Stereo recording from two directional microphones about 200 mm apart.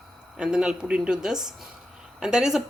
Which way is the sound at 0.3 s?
5° right (ahead or behind).